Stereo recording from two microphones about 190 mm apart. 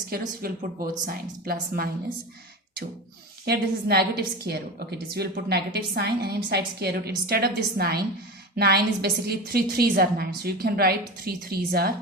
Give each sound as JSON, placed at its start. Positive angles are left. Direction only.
{"t": 0.1, "sound": "a woman's voice", "side_deg": -50}
{"t": 3.4, "sound": "a woman's voice", "side_deg": -55}